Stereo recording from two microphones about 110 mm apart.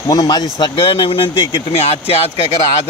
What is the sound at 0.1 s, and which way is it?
Speech, 35° left (ahead or behind).